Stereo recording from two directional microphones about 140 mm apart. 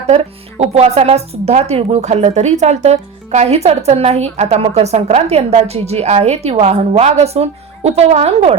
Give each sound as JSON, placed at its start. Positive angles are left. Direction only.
{"t": 0.1, "sound": "speech", "side_deg": -55}